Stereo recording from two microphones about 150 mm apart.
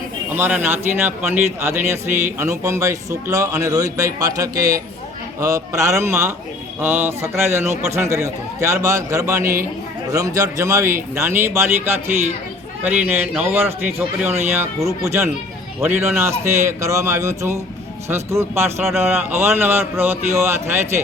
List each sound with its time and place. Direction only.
0.3 s a man's voice: 15° right (ahead or behind)